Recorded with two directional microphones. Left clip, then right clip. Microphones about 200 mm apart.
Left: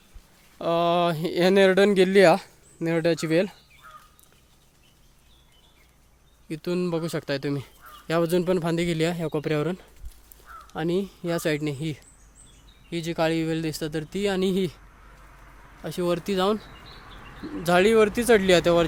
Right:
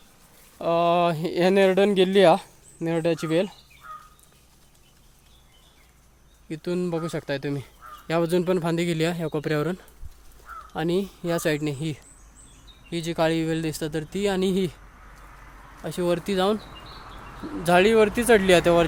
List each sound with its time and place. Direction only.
0.6 s speech: 15° left (ahead or behind)
6.5 s speech: 15° left (ahead or behind)
15.8 s speech: 5° left (ahead or behind)
16.8 s bird: 30° right (ahead or behind)
17.6 s speech: 5° left (ahead or behind)